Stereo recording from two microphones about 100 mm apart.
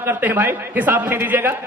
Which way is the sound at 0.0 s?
20° right (ahead or behind).